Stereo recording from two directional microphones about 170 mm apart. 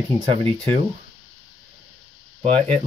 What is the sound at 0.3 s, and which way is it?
Speech, 35° right (ahead or behind).